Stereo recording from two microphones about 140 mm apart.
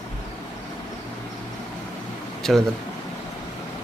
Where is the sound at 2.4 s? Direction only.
5° left (ahead or behind).